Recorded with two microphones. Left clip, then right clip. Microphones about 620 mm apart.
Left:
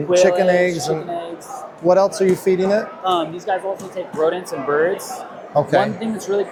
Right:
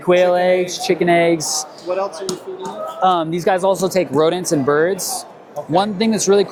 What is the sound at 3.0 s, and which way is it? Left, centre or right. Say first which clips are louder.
Speech: right 4 dB; right.